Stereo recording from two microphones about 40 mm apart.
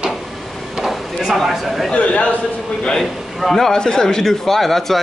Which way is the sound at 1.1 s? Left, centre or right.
Centre.